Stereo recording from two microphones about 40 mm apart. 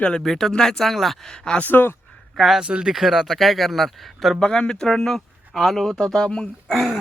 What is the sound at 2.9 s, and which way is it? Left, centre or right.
Speech, centre.